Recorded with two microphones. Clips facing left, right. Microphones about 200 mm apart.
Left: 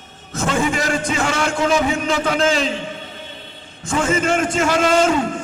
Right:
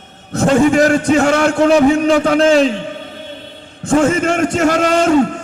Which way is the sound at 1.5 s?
60° right (ahead or behind).